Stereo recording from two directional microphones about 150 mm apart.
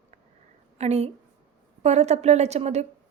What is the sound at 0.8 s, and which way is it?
A woman's voice, 45° right (ahead or behind).